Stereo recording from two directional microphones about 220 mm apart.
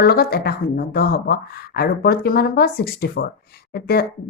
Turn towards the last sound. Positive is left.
turn(degrees=45)  # may be behind; listen again after turning